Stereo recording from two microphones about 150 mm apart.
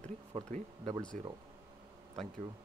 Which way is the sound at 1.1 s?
55° right (ahead or behind).